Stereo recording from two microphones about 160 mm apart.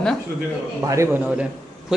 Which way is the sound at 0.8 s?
20° right (ahead or behind).